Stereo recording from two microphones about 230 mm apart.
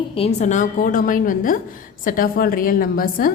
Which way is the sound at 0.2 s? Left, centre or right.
Left.